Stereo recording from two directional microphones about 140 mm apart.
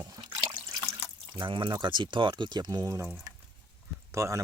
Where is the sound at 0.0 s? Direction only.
25° right (ahead or behind).